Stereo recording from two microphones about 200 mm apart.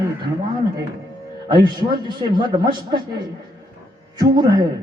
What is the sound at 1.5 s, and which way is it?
A man's voice, 20° right (ahead or behind).